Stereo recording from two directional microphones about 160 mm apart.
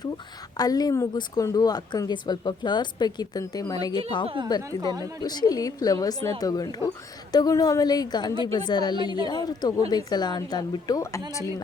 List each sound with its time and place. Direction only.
0.5 s speech: 25° left (ahead or behind)
4.8 s speech: 25° right (ahead or behind)
5.2 s speech: 25° left (ahead or behind)